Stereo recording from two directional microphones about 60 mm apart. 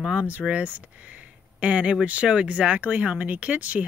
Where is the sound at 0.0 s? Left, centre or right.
Centre.